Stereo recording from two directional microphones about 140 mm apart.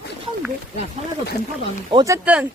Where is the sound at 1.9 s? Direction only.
20° right (ahead or behind).